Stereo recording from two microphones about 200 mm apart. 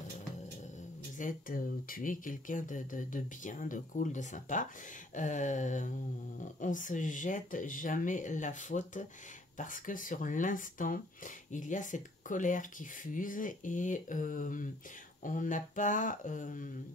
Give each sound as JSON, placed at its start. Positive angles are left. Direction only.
{"t": 1.1, "sound": "speech", "side_deg": 40}